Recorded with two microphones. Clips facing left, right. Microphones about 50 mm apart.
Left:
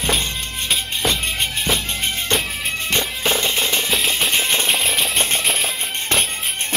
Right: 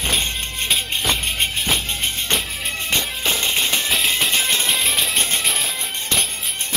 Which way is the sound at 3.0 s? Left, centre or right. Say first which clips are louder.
Left 4 dB; left.